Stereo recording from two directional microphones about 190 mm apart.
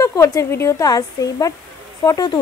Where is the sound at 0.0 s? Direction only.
15° left (ahead or behind).